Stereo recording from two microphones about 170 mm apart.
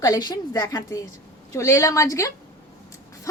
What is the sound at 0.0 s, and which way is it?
A woman's voice, 25° left (ahead or behind).